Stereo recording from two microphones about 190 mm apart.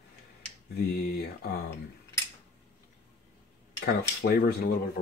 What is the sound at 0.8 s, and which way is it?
Speech, 55° left (ahead or behind).